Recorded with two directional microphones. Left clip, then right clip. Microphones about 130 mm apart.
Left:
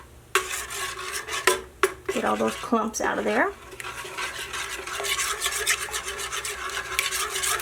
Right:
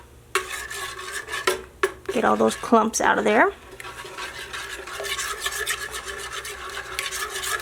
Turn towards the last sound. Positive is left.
turn(degrees=0)  # may be behind; listen again after turning